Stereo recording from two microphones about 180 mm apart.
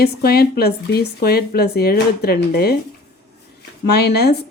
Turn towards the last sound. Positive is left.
turn(degrees=65)  # may be behind; listen again after turning